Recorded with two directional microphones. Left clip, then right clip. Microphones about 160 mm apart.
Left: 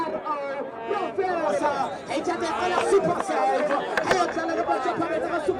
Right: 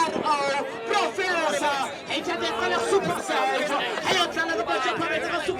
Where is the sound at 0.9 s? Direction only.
35° right (ahead or behind).